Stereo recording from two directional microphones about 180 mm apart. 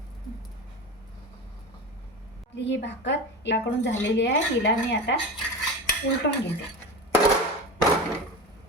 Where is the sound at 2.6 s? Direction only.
75° left (ahead or behind).